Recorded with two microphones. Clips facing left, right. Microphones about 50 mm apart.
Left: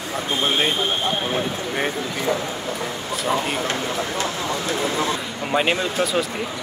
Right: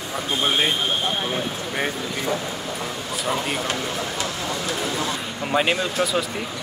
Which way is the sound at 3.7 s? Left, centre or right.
Left.